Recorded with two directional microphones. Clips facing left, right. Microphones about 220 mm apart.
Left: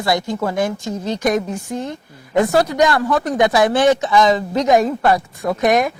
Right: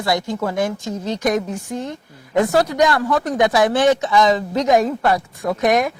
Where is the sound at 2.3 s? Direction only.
10° left (ahead or behind).